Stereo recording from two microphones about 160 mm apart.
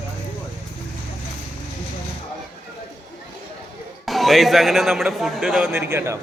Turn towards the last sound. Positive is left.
turn(degrees=-15)  # may be behind; listen again after turning